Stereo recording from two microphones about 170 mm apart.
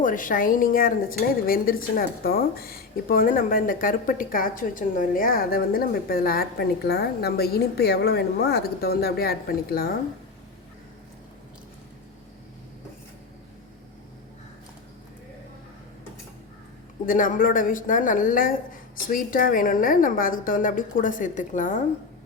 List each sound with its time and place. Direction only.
0.0 s speech: 50° left (ahead or behind)
17.1 s speech: 55° left (ahead or behind)